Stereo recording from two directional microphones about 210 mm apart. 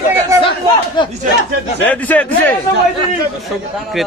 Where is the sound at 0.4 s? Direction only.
25° left (ahead or behind).